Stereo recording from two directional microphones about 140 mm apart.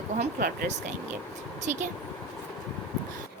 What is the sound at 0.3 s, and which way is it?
Speech, 90° right.